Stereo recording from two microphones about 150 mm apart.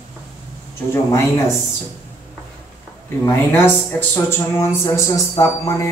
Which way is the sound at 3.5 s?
15° left (ahead or behind).